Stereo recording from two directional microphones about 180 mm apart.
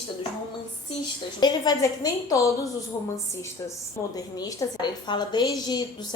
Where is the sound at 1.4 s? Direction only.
25° left (ahead or behind).